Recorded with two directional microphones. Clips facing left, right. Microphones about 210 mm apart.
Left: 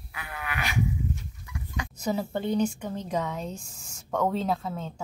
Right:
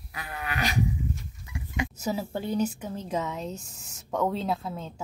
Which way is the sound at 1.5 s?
25° right (ahead or behind).